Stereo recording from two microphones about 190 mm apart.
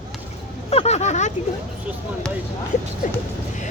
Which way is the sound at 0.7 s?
35° left (ahead or behind).